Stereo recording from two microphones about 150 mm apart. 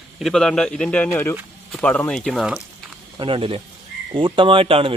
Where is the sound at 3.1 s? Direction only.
35° right (ahead or behind).